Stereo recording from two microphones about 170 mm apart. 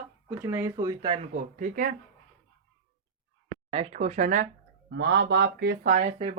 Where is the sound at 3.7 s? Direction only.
40° right (ahead or behind).